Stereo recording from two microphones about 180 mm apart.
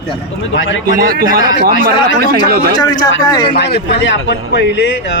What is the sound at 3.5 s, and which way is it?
Speech, 65° left (ahead or behind).